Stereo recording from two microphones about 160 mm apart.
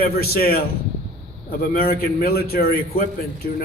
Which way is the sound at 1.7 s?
70° left (ahead or behind).